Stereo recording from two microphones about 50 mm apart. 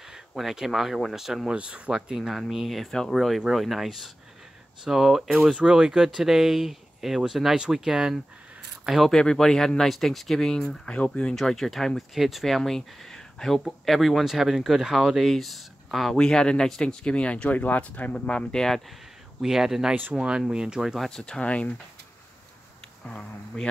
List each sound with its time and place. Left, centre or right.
0.3 s speech: centre
1.5 s speech: right
2.0 s speech: centre
5.6 s speech: centre
9.1 s speech: centre
16.2 s speech: centre
19.4 s speech: centre
21.1 s speech: centre
23.0 s speech: left